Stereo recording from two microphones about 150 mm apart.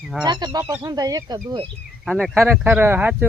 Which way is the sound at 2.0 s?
Centre (ahead or behind).